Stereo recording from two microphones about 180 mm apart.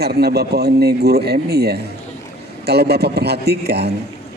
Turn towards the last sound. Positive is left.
turn(degrees=-65)  # may be behind; listen again after turning